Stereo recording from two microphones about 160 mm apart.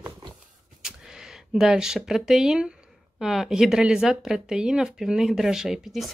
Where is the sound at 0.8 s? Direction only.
5° right (ahead or behind).